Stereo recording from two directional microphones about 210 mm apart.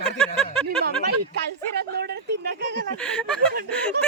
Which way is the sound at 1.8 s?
50° right (ahead or behind).